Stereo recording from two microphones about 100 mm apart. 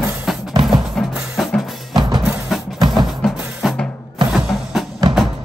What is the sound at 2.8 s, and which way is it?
Music, 45° right (ahead or behind).